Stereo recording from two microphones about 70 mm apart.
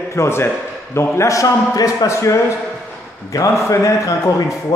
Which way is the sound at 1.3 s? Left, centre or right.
Left.